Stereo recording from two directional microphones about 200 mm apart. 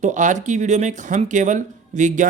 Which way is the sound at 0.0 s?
40° right (ahead or behind).